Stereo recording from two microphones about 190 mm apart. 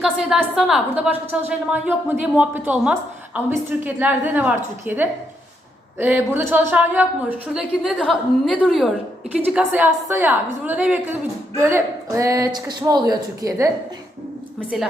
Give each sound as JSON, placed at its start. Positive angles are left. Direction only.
{"t": 0.0, "sound": "a woman's voice", "side_deg": -5}
{"t": 14.7, "sound": "a woman's voice", "side_deg": 0}